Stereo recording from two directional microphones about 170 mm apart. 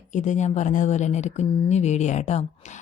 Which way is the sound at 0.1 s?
45° left (ahead or behind).